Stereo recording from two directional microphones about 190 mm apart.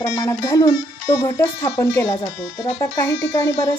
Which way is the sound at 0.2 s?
20° left (ahead or behind).